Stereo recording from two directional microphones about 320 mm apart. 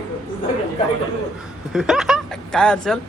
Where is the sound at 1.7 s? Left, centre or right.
Centre.